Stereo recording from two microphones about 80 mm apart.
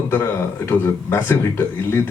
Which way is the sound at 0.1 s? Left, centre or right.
Left.